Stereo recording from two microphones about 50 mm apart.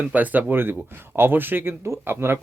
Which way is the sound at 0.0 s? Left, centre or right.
Right.